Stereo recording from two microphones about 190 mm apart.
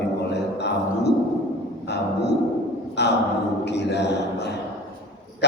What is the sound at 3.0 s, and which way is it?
Gasp, 65° left (ahead or behind).